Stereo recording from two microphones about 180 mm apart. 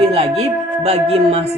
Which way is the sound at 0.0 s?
30° right (ahead or behind).